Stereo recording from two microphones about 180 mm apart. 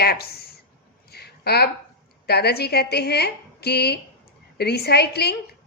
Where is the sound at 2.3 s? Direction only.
65° left (ahead or behind).